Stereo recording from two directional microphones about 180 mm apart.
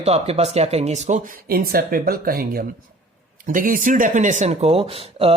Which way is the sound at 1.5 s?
55° right (ahead or behind).